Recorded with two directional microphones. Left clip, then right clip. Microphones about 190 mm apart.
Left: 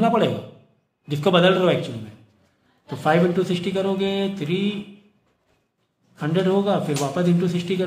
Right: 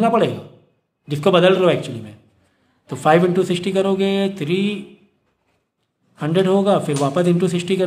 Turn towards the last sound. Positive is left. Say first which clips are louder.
# right 5 dB
turn(degrees=-45)  # may be behind; listen again after turning